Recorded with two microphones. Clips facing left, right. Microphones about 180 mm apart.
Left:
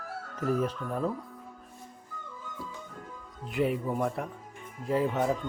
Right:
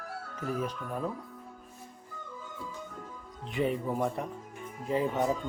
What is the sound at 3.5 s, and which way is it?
Speech, 5° left (ahead or behind).